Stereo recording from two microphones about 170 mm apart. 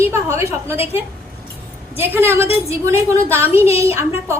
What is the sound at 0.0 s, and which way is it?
Speech, 15° right (ahead or behind).